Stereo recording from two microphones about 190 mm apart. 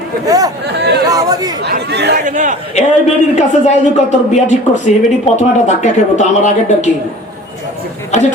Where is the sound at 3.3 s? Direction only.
35° left (ahead or behind).